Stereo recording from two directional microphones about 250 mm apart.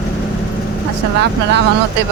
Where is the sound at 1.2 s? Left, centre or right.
Right.